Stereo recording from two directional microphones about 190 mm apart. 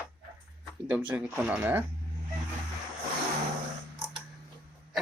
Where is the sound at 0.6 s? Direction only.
5° right (ahead or behind).